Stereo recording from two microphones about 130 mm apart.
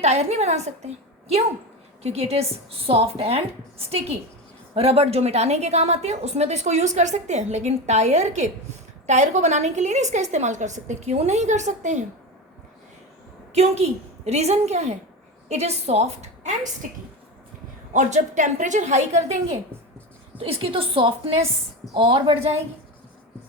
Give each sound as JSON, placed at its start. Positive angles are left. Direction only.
{"t": 0.0, "sound": "a woman's voice", "side_deg": -60}
{"t": 2.0, "sound": "a woman's voice", "side_deg": -55}
{"t": 13.5, "sound": "a woman's voice", "side_deg": -55}
{"t": 17.9, "sound": "a woman's voice", "side_deg": -70}
{"t": 20.4, "sound": "speech", "side_deg": -45}